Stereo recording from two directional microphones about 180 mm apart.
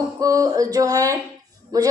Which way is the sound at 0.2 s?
20° right (ahead or behind).